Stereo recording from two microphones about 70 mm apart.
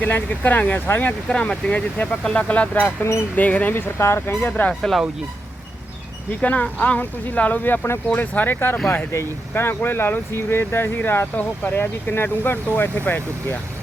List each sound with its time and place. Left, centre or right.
0.0 s speech: left
1.3 s speech: centre
3.0 s speech: left
3.3 s speech: left
4.4 s speech: left
4.7 s speech: centre
6.4 s speech: left